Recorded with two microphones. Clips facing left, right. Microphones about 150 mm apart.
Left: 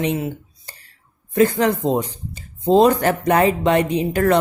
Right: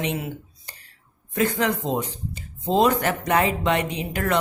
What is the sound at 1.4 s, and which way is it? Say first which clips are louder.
Speech: left 6 dB; 40° left (ahead or behind).